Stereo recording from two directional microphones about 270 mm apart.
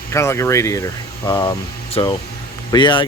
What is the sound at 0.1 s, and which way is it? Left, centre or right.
Speech, centre.